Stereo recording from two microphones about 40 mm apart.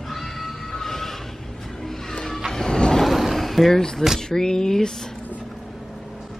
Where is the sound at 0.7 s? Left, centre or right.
Centre.